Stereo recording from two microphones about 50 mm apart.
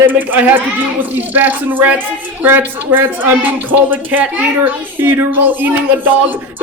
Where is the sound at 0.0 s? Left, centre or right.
Right.